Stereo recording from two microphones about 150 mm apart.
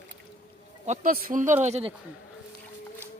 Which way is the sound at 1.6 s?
45° right (ahead or behind).